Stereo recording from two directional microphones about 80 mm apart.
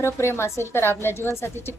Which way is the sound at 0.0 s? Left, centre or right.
Left.